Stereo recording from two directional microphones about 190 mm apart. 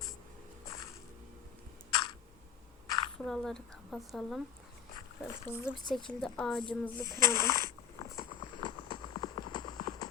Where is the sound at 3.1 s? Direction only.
Centre (ahead or behind).